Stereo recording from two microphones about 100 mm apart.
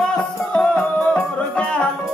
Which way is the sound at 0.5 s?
15° left (ahead or behind).